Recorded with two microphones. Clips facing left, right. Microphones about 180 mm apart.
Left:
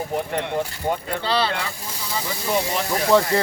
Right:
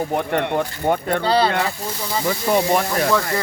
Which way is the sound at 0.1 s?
60° right (ahead or behind).